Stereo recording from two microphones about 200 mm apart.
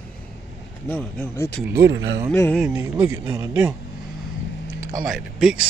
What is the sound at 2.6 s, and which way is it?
Speech, 10° right (ahead or behind).